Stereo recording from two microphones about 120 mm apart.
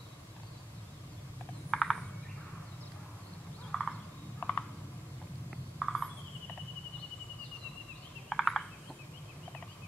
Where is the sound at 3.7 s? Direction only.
5° left (ahead or behind).